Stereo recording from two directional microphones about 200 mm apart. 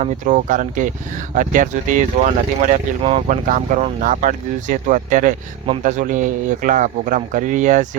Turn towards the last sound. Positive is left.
turn(degrees=-40)  # may be behind; listen again after turning